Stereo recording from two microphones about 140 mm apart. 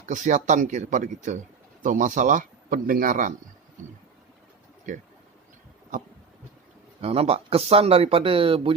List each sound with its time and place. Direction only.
0.0 s speech: 60° right (ahead or behind)
7.0 s speech: 45° right (ahead or behind)